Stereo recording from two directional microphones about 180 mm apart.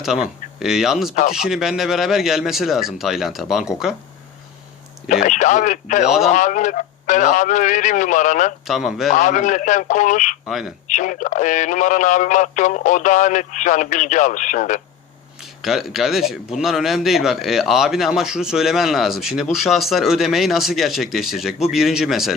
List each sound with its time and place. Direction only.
0.0 s a man's voice: 5° right (ahead or behind)
5.0 s a man's voice: 45° left (ahead or behind)
6.1 s a man's voice: centre (ahead or behind)
6.3 s a man's voice: 45° left (ahead or behind)
8.6 s a man's voice: centre (ahead or behind)
9.1 s a man's voice: 45° left (ahead or behind)
10.5 s a man's voice: 5° right (ahead or behind)
10.8 s a man's voice: 45° left (ahead or behind)
15.4 s a man's voice: centre (ahead or behind)